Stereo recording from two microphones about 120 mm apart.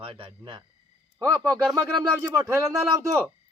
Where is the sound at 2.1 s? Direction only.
20° right (ahead or behind).